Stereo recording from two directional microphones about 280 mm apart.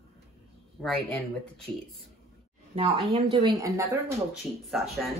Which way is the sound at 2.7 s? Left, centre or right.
Centre.